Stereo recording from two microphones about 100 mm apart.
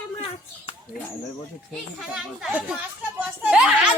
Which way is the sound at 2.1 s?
5° right (ahead or behind).